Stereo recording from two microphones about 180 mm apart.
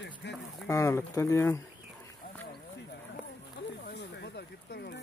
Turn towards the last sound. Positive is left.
turn(degrees=65)  # may be behind; listen again after turning